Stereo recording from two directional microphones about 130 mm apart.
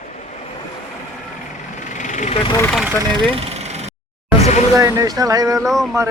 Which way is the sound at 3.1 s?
40° right (ahead or behind).